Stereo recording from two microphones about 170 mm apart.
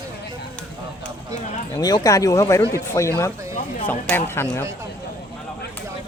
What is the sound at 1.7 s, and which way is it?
Speech, 20° left (ahead or behind).